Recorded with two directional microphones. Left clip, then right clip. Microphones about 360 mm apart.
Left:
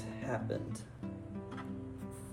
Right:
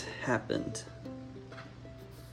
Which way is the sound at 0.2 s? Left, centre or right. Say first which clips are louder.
Right 6 dB; centre.